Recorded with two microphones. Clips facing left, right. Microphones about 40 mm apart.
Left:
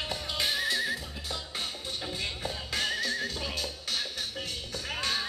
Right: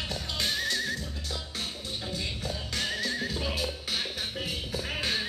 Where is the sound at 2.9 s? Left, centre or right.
Centre.